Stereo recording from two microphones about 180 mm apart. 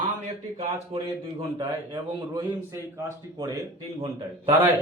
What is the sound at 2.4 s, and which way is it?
Speech, 15° right (ahead or behind).